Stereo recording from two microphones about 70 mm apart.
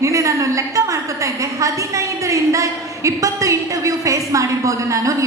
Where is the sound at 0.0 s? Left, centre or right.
Right.